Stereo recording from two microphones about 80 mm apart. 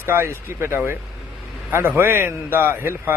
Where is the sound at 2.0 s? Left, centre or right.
Right.